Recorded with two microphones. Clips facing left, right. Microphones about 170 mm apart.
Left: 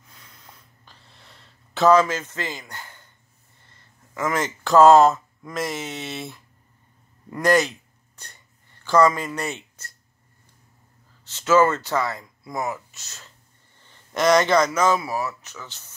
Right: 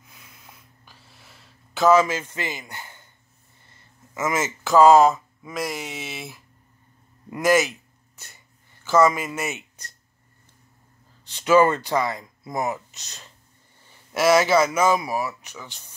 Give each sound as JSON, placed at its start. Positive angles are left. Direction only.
{"t": 0.1, "sound": "a sound", "side_deg": -10}
{"t": 4.3, "sound": "speech", "side_deg": -5}
{"t": 8.8, "sound": "speech", "side_deg": -5}
{"t": 11.2, "sound": "speech", "side_deg": -15}
{"t": 13.8, "sound": "speech", "side_deg": -5}